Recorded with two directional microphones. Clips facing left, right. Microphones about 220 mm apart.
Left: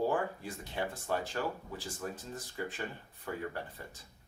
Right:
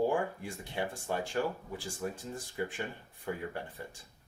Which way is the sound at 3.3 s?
15° right (ahead or behind).